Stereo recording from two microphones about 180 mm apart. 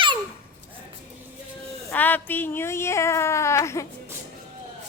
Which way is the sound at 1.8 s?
10° left (ahead or behind).